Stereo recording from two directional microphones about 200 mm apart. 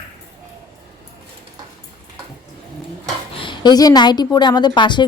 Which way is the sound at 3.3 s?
25° left (ahead or behind).